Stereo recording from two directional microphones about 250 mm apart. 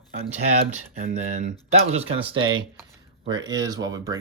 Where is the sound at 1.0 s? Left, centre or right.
Right.